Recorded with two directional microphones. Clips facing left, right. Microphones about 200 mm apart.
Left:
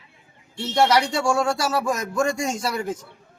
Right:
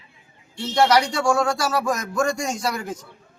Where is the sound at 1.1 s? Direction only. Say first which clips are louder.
Right 1 dB; 25° left (ahead or behind).